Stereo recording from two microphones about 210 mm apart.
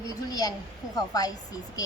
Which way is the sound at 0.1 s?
15° left (ahead or behind).